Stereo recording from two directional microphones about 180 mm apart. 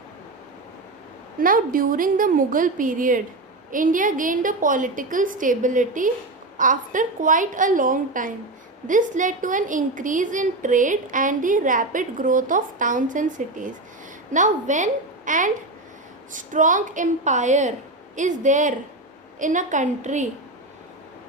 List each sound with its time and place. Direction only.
1.4 s a woman's voice: 50° right (ahead or behind)